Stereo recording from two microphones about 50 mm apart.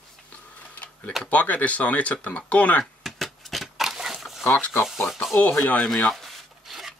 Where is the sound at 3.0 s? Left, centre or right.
Centre.